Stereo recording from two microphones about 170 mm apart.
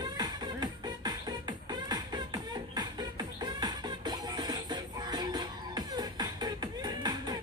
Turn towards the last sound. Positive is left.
turn(degrees=-25)  # may be behind; listen again after turning